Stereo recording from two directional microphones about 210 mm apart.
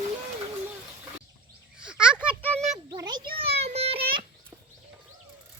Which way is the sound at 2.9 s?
20° right (ahead or behind).